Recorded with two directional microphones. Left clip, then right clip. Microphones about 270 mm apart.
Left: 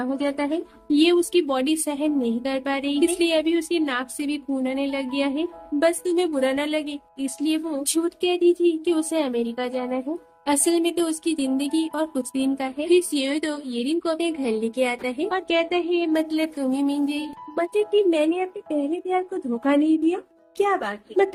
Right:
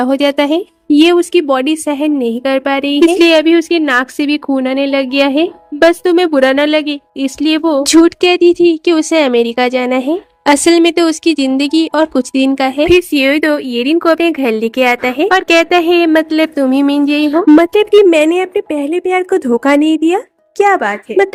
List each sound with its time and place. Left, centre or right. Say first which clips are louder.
0.0 s a woman's voice: right 14 dB; right